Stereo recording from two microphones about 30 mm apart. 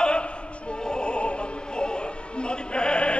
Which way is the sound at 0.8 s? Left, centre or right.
Left.